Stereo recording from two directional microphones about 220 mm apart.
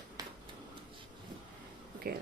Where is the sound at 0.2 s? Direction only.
15° right (ahead or behind).